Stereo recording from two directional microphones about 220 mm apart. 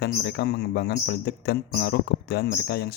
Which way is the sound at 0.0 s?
50° left (ahead or behind).